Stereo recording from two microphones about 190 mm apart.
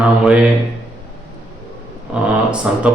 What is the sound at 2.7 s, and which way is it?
Speech, 5° right (ahead or behind).